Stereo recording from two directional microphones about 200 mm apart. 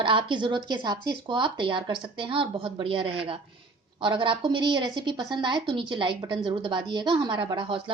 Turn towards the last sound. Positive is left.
turn(degrees=-25)  # may be behind; listen again after turning